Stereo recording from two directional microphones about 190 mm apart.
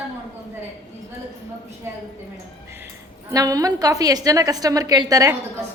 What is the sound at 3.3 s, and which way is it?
A woman's voice, 20° right (ahead or behind).